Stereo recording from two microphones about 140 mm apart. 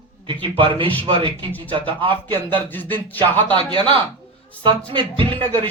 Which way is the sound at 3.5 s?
35° right (ahead or behind).